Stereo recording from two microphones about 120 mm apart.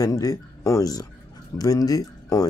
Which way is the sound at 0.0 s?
30° left (ahead or behind).